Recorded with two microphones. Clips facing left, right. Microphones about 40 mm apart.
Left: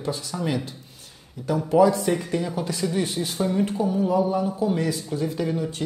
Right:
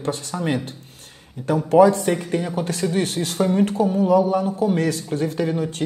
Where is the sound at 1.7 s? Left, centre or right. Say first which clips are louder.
Right 4 dB; right.